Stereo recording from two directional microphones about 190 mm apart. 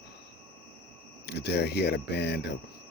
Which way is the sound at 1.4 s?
60° left (ahead or behind).